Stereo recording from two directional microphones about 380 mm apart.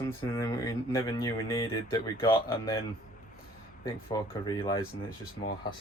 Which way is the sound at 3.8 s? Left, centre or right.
Centre.